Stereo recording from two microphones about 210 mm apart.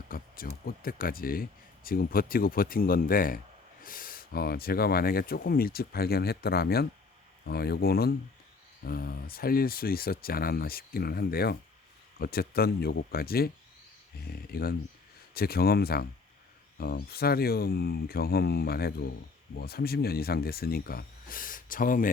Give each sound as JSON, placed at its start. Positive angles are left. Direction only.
{"t": 0.1, "sound": "speech", "side_deg": 45}
{"t": 14.5, "sound": "speech", "side_deg": 45}